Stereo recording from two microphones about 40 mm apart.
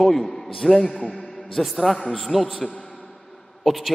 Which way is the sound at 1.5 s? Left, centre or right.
Centre.